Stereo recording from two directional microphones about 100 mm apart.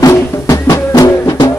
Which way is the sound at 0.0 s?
35° left (ahead or behind).